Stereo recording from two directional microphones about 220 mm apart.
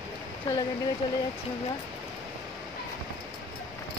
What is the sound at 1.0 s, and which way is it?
Speech, 20° left (ahead or behind).